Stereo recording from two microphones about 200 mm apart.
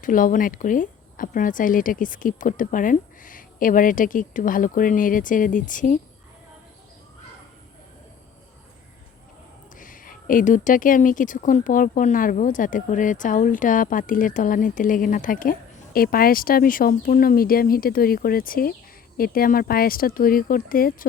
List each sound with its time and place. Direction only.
0.0 s speech: 45° left (ahead or behind)
9.7 s speech: 45° left (ahead or behind)